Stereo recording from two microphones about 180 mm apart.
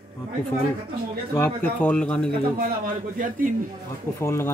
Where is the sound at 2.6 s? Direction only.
50° right (ahead or behind).